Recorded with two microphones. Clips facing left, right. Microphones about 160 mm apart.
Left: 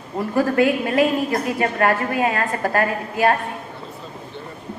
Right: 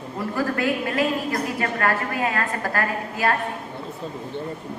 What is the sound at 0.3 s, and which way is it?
A woman's voice, 20° left (ahead or behind).